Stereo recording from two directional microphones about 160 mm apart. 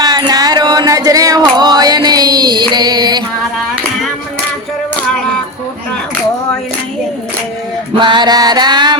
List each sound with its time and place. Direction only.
0.0 s music: 25° right (ahead or behind)
7.9 s music: 30° right (ahead or behind)